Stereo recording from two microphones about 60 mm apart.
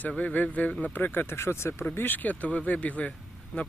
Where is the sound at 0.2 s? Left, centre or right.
Left.